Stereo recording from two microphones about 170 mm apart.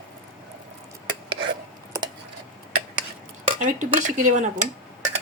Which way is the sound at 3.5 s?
50° right (ahead or behind).